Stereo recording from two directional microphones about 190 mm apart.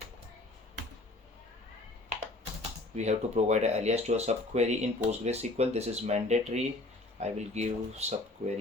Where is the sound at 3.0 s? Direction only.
35° right (ahead or behind).